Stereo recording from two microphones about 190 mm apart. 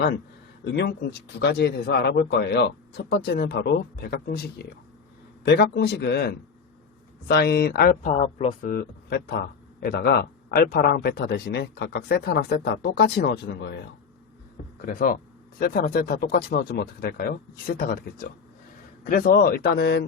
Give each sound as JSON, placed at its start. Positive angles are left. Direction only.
{"t": 0.6, "sound": "a man's voice", "side_deg": 65}
{"t": 5.6, "sound": "a man's voice", "side_deg": 60}
{"t": 8.2, "sound": "speech", "side_deg": 35}
{"t": 8.6, "sound": "a man's voice", "side_deg": 50}
{"t": 14.8, "sound": "speech", "side_deg": 45}